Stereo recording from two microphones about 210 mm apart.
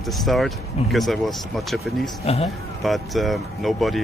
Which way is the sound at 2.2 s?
30° left (ahead or behind).